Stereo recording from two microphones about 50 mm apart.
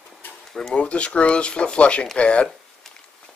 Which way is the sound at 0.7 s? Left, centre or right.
Left.